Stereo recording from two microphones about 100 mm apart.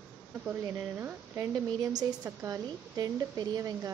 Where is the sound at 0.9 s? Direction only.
25° right (ahead or behind).